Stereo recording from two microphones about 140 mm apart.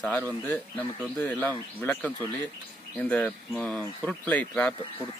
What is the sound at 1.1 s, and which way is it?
Speech, 15° left (ahead or behind).